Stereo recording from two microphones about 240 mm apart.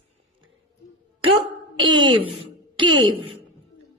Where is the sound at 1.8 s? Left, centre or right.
Centre.